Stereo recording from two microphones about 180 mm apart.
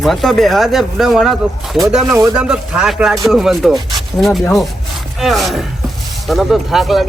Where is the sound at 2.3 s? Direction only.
5° right (ahead or behind).